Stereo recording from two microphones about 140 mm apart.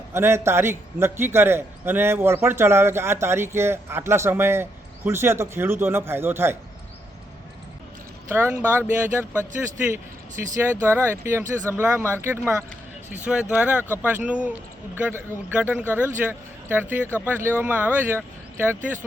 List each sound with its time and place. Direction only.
0.1 s a man's voice: 20° right (ahead or behind)
8.3 s a man's voice: 15° right (ahead or behind)